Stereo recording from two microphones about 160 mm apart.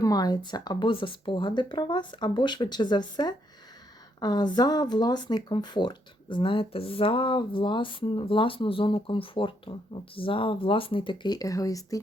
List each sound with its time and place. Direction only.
0.0 s speech: 25° left (ahead or behind)